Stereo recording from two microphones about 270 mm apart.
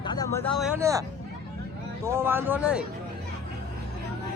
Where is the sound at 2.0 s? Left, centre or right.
Centre.